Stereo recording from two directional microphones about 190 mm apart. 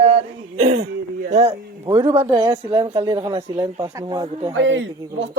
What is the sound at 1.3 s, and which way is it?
Speech, 35° right (ahead or behind).